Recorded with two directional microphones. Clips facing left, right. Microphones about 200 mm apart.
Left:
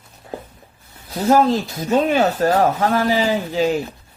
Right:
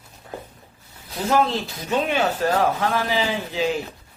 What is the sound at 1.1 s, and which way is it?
A man's voice, 40° left (ahead or behind).